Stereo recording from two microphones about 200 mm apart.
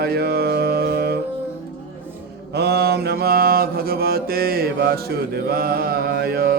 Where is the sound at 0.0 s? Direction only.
50° right (ahead or behind).